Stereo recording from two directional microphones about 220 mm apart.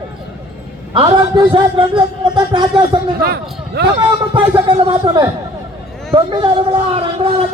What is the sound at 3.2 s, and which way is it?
Speech, 45° right (ahead or behind).